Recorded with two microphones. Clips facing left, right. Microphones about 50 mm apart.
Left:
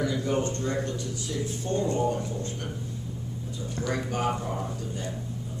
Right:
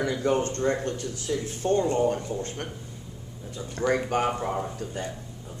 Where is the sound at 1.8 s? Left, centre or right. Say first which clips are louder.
Right 1 dB; right.